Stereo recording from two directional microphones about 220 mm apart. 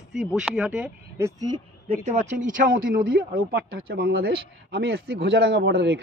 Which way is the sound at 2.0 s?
35° right (ahead or behind).